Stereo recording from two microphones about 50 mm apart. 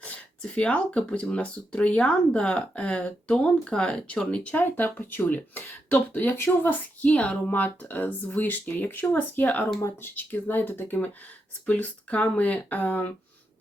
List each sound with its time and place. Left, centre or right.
0.0 s speech: left
4.5 s speech: left
7.1 s speech: left